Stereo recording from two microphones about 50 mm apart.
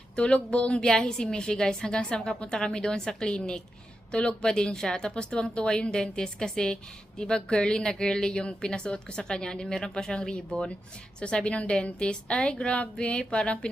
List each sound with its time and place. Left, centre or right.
0.2 s a woman's voice: left